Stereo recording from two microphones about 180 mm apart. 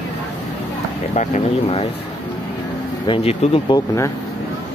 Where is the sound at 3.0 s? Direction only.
30° left (ahead or behind).